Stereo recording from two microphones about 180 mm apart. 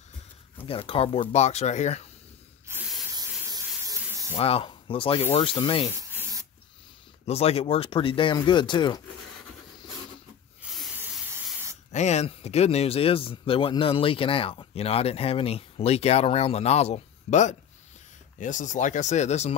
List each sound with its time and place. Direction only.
0.7 s speech: 30° left (ahead or behind)
2.7 s spray: 5° right (ahead or behind)
3.2 s a sound: 20° right (ahead or behind)
4.4 s speech: 35° left (ahead or behind)
5.9 s spray: 20° right (ahead or behind)
7.2 s speech: 35° left (ahead or behind)
10.6 s snake: centre (ahead or behind)
11.9 s speech: 40° left (ahead or behind)